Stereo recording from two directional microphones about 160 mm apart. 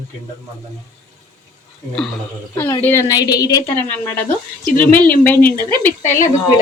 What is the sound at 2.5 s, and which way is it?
A woman's voice, 15° left (ahead or behind).